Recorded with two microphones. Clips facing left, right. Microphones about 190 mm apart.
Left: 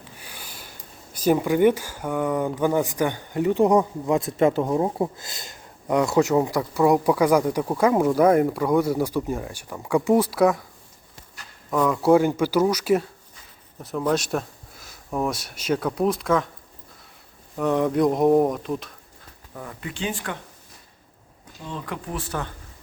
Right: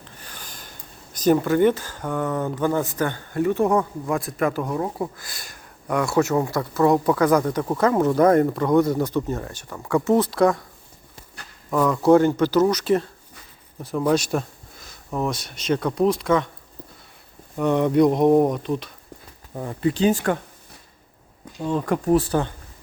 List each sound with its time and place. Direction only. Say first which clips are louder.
0.0 s a sound: even; 10° left (ahead or behind)
1.1 s speech: right 2 dB; 10° left (ahead or behind)
11.9 s speech: right 2 dB; 5° left (ahead or behind)
17.6 s speech: right 3 dB; centre (ahead or behind)
19.5 s speech: right 11 dB; 30° right (ahead or behind)
21.6 s speech: right 10 dB; 45° right (ahead or behind)